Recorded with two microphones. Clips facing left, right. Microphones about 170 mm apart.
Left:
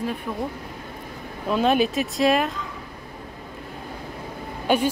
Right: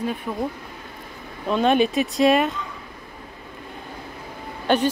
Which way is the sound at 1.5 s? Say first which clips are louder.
Right 1 dB; centre (ahead or behind).